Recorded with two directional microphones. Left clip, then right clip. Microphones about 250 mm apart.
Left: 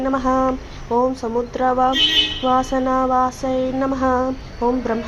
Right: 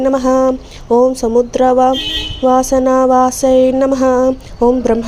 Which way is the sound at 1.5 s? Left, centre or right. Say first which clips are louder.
Right 4 dB; right.